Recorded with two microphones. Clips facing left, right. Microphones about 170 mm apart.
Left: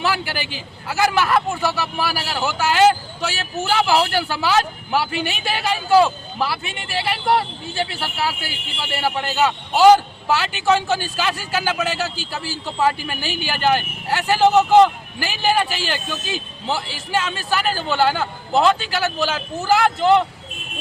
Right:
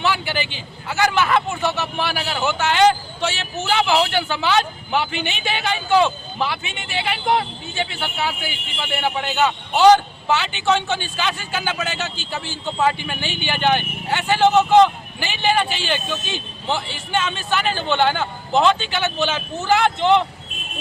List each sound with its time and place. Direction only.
0.1 s a man's voice: 5° left (ahead or behind)
7.9 s a man's voice: 5° left (ahead or behind)